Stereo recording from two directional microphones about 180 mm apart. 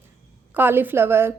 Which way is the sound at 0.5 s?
10° right (ahead or behind).